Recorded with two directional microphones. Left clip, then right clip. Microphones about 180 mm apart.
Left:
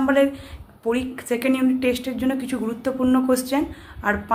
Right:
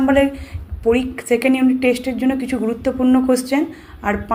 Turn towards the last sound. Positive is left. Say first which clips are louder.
# right 2 dB
turn(degrees=-10)  # may be behind; listen again after turning